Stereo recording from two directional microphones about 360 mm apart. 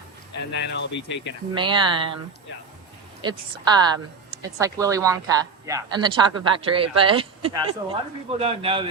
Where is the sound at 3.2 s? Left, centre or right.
Centre.